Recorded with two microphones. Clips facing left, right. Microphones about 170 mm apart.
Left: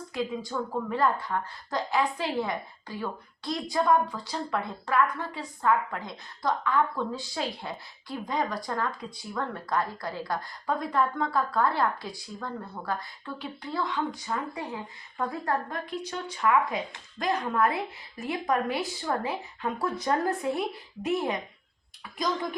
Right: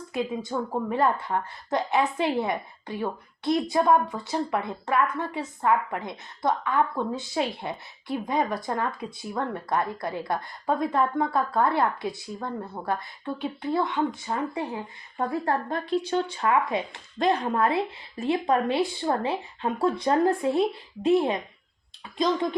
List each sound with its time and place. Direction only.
0.1 s a woman's voice: 25° right (ahead or behind)